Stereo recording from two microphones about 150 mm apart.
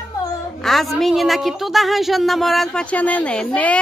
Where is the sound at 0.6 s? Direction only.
Centre (ahead or behind).